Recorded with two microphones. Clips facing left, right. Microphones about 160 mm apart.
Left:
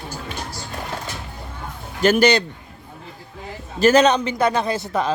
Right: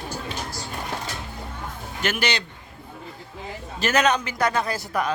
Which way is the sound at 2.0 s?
40° left (ahead or behind).